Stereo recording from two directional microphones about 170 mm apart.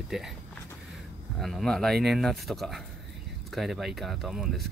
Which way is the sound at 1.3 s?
Centre (ahead or behind).